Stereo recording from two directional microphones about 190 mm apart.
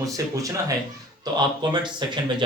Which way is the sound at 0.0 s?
15° right (ahead or behind).